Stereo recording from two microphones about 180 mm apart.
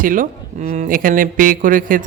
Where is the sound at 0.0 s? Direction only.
50° right (ahead or behind).